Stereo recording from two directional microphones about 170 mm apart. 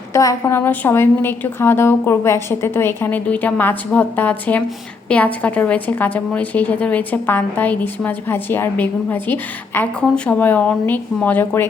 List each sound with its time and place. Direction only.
0.1 s a woman's voice: 20° left (ahead or behind)